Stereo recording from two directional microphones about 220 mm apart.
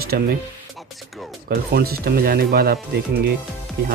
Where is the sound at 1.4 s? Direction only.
45° right (ahead or behind).